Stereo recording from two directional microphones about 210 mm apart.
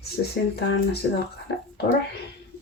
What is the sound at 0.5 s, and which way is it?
Speech, 50° left (ahead or behind).